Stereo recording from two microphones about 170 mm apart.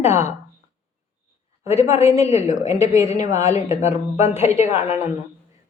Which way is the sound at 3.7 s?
40° left (ahead or behind).